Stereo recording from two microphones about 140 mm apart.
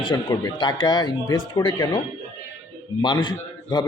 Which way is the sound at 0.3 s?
30° left (ahead or behind).